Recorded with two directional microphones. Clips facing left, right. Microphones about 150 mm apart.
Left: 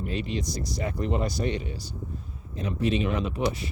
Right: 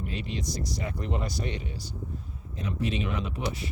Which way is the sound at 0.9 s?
35° left (ahead or behind).